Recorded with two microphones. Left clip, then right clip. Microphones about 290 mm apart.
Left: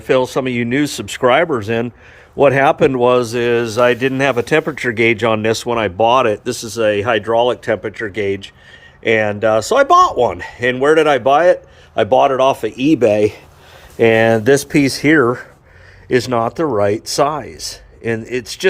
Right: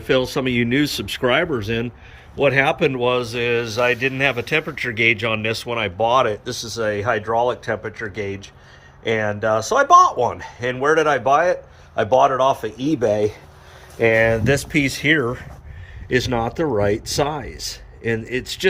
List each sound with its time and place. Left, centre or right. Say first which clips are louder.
0.1 s speech: left 4 dB; centre